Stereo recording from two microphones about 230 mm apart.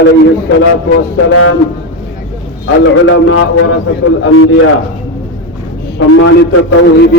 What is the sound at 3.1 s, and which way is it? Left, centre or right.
Speech, left.